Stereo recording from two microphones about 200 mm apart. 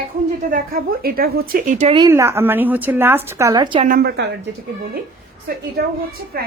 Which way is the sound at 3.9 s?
55° right (ahead or behind).